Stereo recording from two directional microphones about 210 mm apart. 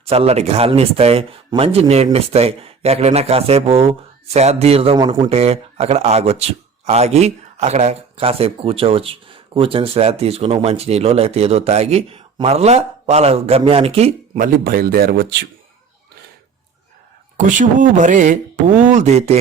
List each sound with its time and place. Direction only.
0.0 s speech: 30° right (ahead or behind); by 15.4 s 50° right (ahead or behind)
17.3 s speech: 35° right (ahead or behind)